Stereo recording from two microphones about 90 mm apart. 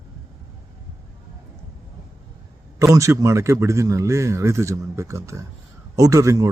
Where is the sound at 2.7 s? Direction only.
35° right (ahead or behind).